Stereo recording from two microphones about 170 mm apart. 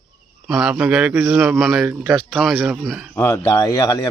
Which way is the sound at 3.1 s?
15° left (ahead or behind).